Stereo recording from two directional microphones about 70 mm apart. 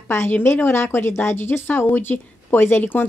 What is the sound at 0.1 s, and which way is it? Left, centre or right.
A woman's voice, left.